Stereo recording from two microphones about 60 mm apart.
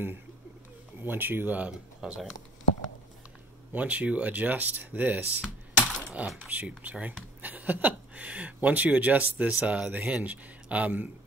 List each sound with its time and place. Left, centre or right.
1.0 s speech: right
1.7 s speech: centre
3.7 s speech: right
5.8 s coin: centre
6.4 s speech: right